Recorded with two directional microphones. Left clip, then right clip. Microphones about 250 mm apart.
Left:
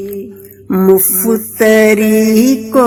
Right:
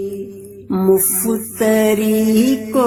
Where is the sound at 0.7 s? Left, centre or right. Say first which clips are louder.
Left 5 dB; left.